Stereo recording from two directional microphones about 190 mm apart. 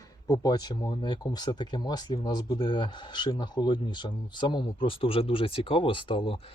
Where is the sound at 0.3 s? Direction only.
20° left (ahead or behind).